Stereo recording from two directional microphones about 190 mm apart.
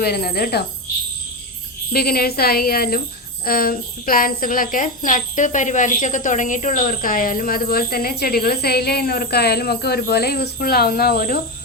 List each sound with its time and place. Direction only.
0.0 s speech: 55° left (ahead or behind)
1.9 s speech: 55° left (ahead or behind)